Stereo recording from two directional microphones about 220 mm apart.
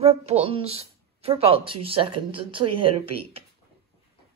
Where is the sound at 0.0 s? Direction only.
30° right (ahead or behind).